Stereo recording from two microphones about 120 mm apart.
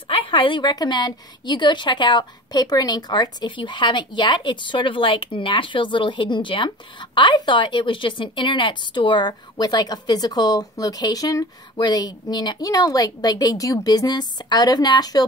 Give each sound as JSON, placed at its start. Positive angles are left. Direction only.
{"t": 0.1, "sound": "a woman's voice", "side_deg": 45}